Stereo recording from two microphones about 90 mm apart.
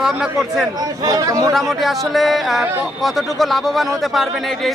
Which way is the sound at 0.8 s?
45° right (ahead or behind).